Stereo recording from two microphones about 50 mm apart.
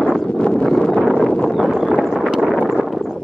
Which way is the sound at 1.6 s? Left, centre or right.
Centre.